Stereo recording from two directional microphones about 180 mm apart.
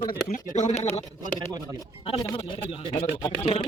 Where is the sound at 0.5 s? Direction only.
40° left (ahead or behind).